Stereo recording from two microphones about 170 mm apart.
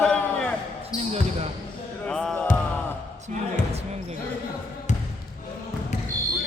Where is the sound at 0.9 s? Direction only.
20° left (ahead or behind).